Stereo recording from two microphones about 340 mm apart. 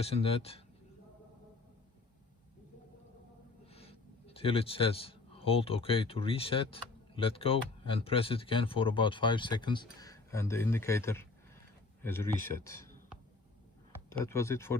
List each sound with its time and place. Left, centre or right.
0.0 s speech: centre
3.7 s a man's voice: centre
14.2 s speech: centre